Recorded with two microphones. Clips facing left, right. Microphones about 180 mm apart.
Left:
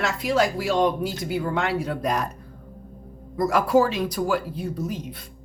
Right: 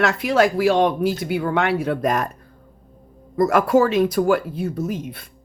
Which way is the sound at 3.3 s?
50° right (ahead or behind).